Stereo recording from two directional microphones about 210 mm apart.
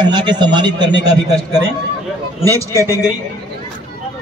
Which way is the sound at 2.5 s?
15° left (ahead or behind).